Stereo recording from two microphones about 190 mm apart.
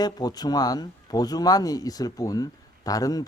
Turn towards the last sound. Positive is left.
turn(degrees=20)  # may be behind; listen again after turning